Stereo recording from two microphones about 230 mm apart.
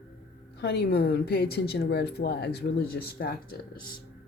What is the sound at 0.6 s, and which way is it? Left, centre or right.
A woman's voice, left.